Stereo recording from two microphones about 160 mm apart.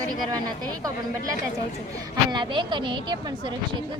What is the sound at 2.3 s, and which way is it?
A woman's voice, 30° right (ahead or behind).